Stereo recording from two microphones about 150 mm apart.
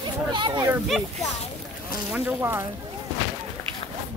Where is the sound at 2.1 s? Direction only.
5° right (ahead or behind).